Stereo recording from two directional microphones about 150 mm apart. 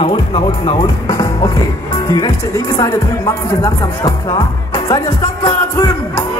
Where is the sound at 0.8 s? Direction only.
25° left (ahead or behind).